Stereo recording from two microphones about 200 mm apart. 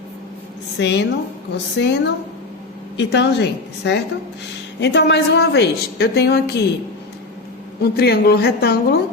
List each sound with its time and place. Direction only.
0.8 s a woman's voice: 60° left (ahead or behind)
7.8 s a woman's voice: 55° left (ahead or behind)